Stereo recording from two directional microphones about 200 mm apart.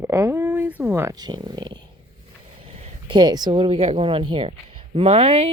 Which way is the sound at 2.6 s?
30° right (ahead or behind).